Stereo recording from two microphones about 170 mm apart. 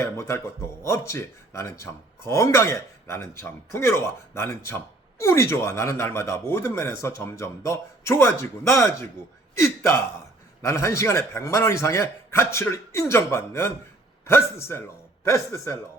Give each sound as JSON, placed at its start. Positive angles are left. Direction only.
{"t": 0.0, "sound": "a man's voice", "side_deg": 15}